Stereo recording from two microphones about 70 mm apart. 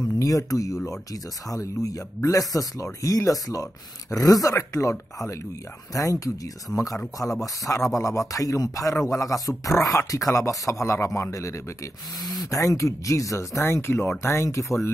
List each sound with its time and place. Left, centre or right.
0.2 s speech: left
12.2 s speech: centre
12.4 s speech: left